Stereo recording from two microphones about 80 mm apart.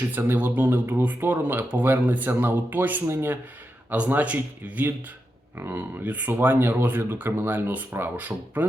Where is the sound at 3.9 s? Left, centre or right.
Right.